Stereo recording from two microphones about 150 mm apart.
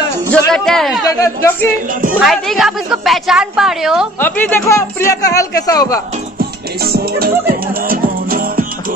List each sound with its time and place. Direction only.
0.5 s a woman's voice: centre (ahead or behind)
1.0 s speech: 20° left (ahead or behind)
2.1 s a woman's voice: centre (ahead or behind)
4.2 s speech: 15° left (ahead or behind)
6.8 s music: 90° right; by 8.6 s 70° right (ahead or behind)